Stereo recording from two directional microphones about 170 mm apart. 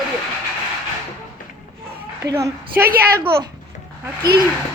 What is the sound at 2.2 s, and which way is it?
Speech, 15° right (ahead or behind).